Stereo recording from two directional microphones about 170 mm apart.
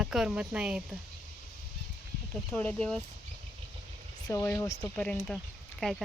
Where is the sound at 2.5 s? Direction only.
5° left (ahead or behind).